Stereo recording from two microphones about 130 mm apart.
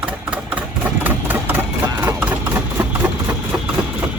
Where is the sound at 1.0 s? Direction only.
15° right (ahead or behind).